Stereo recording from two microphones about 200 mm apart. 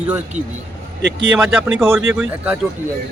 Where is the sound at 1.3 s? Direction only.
5° right (ahead or behind).